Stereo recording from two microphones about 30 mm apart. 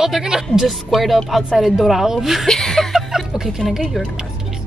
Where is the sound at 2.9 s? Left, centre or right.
Centre.